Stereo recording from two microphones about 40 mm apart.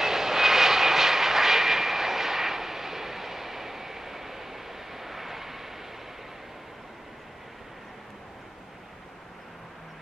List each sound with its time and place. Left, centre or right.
0.0 s vehicle: centre